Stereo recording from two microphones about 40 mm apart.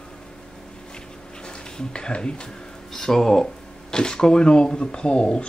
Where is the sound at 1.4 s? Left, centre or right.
Left.